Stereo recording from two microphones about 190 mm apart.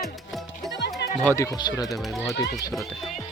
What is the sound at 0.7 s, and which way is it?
Music, 65° left (ahead or behind).